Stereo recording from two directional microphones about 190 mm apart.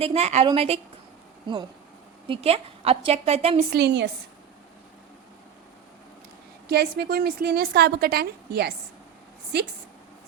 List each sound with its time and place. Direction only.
0.0 s a woman's voice: 35° right (ahead or behind)
2.2 s a woman's voice: 30° right (ahead or behind)
3.7 s a woman's voice: 60° right (ahead or behind)
6.7 s a woman's voice: 60° right (ahead or behind)